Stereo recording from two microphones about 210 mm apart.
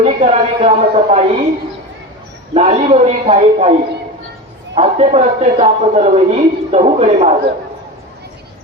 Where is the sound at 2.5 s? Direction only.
30° right (ahead or behind).